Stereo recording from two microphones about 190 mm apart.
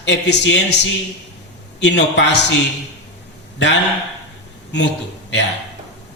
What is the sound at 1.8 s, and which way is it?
Speech, 65° left (ahead or behind).